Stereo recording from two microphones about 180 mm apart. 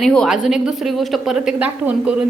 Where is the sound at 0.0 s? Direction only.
5° left (ahead or behind).